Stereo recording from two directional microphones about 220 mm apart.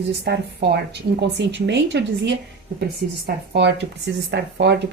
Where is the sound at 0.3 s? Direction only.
50° right (ahead or behind).